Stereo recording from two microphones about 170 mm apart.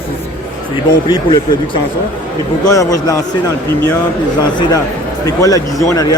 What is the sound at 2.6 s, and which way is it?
Speech, 20° left (ahead or behind).